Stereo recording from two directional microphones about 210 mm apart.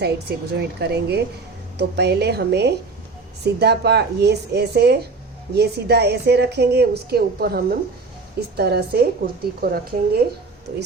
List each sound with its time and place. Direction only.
0.0 s a woman's voice: 50° right (ahead or behind)